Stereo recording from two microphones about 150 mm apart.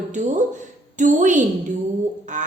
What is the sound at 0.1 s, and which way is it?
A woman's voice, 55° right (ahead or behind).